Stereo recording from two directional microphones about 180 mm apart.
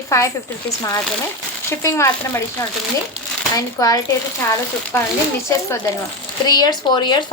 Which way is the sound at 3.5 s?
20° left (ahead or behind).